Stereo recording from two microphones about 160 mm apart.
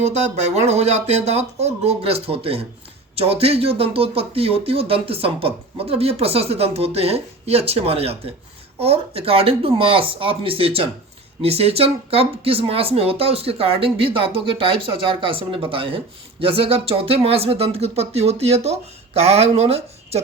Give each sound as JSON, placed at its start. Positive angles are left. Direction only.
{"t": 0.0, "sound": "speech", "side_deg": -45}